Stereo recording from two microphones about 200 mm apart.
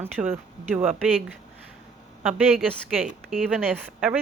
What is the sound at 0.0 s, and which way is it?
Speech, 10° right (ahead or behind).